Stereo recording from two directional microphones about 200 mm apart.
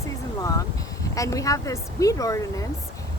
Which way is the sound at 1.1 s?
15° left (ahead or behind).